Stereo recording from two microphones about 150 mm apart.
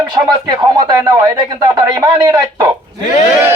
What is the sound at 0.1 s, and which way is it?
Speech, 30° right (ahead or behind).